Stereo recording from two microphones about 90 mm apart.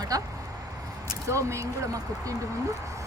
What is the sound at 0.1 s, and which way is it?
Speech, 45° right (ahead or behind).